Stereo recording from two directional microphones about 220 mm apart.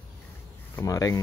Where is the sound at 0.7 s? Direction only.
15° left (ahead or behind).